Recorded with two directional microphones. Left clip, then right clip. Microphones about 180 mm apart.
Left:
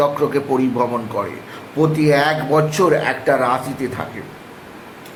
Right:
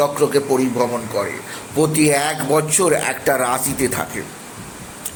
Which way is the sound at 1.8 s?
20° right (ahead or behind).